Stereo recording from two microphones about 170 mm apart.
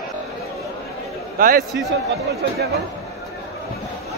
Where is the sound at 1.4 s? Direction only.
55° right (ahead or behind).